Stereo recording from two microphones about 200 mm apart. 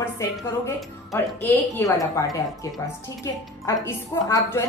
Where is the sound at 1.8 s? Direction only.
15° left (ahead or behind).